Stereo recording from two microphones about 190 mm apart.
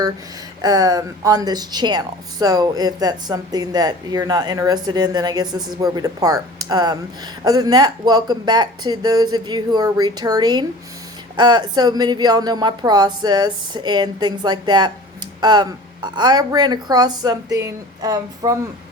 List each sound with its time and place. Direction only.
0.6 s speech: 20° right (ahead or behind)